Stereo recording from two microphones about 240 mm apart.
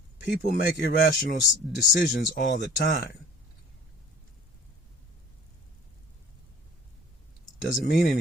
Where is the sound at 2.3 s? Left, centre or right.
Left.